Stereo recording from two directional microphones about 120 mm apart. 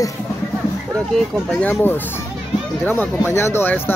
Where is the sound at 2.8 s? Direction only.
15° left (ahead or behind).